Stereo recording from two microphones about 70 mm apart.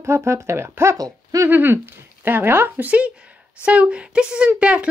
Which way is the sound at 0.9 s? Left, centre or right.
Right.